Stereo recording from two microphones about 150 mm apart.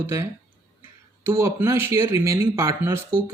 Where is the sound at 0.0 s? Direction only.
20° right (ahead or behind).